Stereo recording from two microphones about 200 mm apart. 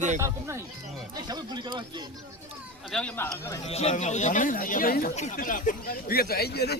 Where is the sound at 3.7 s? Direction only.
30° left (ahead or behind); by 6.8 s 55° left (ahead or behind).